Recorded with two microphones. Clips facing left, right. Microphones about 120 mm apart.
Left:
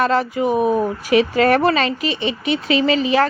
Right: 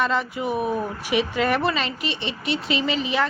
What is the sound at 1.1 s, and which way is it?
Speech, 90° left.